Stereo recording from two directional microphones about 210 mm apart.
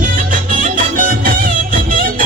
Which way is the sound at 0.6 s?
40° right (ahead or behind).